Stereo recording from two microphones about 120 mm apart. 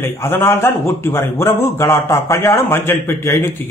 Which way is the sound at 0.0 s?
20° left (ahead or behind).